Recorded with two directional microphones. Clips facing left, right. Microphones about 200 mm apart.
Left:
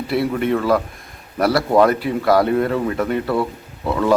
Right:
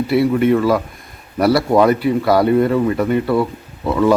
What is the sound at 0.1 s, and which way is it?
Speech, centre (ahead or behind).